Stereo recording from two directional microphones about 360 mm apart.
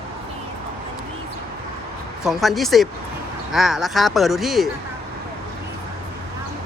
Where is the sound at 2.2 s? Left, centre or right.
Centre.